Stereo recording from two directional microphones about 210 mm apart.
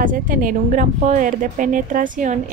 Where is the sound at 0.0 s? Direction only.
40° right (ahead or behind).